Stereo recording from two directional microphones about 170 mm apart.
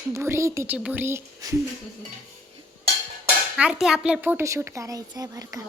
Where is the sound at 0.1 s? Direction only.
15° right (ahead or behind).